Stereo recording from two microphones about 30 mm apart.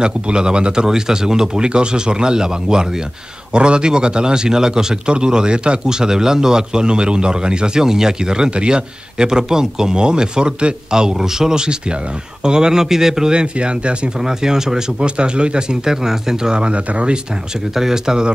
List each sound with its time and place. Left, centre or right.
0.0 s speech: right
0.8 s a man's voice: centre
10.9 s a man's voice: right
13.3 s speech: right
14.2 s a man's voice: centre
15.0 s speech: right
15.8 s a man's voice: centre
16.5 s speech: right
17.7 s a man's voice: centre